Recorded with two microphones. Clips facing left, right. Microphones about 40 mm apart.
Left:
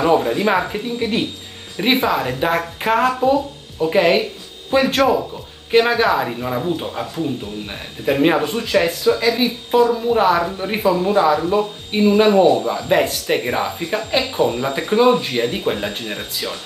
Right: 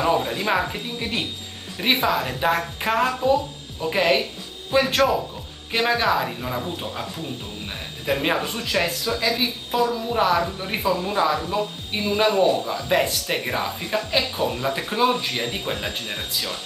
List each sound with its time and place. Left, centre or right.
0.0 s speech: centre